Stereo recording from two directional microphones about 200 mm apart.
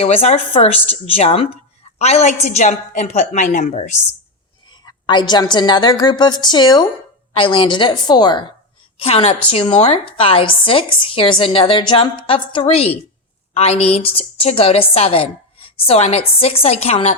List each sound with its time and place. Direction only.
0.0 s a woman's voice: 30° left (ahead or behind)
4.9 s a woman's voice: 20° left (ahead or behind)